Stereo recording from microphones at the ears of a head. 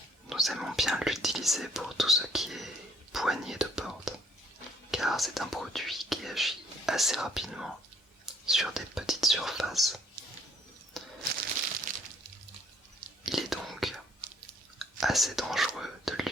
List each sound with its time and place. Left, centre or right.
0.3 s speech: centre
11.3 s a sound: right
13.3 s whispering: centre
15.0 s speech: centre